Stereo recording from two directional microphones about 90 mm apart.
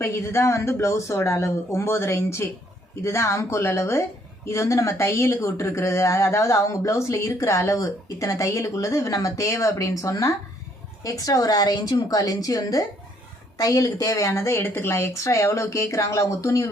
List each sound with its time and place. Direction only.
0.0 s a woman's voice: 30° left (ahead or behind)